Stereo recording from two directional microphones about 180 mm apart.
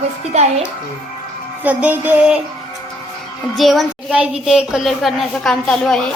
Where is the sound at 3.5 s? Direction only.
Centre (ahead or behind).